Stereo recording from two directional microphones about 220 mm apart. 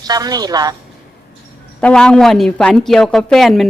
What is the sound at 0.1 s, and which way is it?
Speech, 15° right (ahead or behind).